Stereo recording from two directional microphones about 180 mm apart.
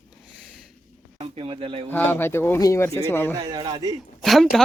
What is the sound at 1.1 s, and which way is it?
Speech, 30° right (ahead or behind).